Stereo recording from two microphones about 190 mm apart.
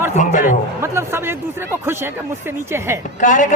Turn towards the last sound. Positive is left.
turn(degrees=40)  # may be behind; listen again after turning